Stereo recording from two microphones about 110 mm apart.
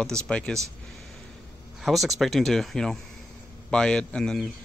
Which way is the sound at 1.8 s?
Centre (ahead or behind).